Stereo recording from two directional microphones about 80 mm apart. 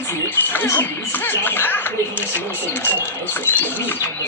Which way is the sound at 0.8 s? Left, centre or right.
Left.